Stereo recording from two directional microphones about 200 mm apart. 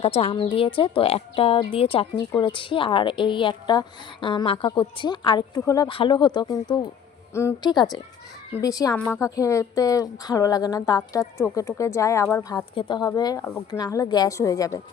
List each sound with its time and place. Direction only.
0.0 s a woman's voice: 30° left (ahead or behind)